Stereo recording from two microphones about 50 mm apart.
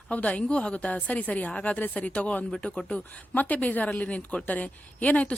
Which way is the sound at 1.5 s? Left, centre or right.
Centre.